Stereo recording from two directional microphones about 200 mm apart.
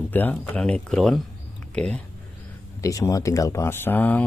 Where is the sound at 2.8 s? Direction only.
15° left (ahead or behind).